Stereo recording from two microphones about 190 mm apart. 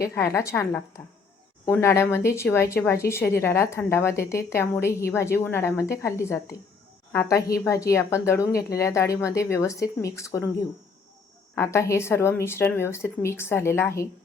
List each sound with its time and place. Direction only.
0.0 s speech: 15° left (ahead or behind)
11.5 s speech: 15° left (ahead or behind)